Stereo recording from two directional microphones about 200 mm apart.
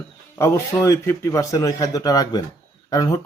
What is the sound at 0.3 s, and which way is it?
Speech, 15° left (ahead or behind).